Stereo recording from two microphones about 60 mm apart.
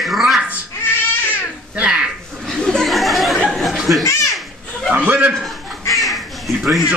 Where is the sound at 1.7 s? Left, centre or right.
Centre.